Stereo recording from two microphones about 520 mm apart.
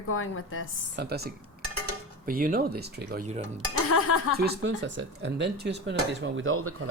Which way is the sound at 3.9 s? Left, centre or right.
Left.